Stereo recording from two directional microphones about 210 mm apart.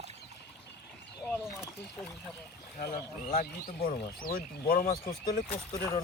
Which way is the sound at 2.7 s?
45° left (ahead or behind).